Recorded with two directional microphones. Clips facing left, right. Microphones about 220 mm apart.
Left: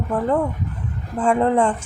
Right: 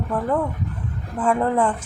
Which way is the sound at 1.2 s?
25° left (ahead or behind).